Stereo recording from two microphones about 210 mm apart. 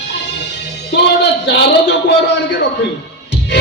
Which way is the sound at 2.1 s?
55° left (ahead or behind).